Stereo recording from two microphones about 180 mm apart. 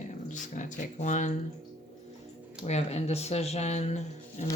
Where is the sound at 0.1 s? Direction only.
45° left (ahead or behind).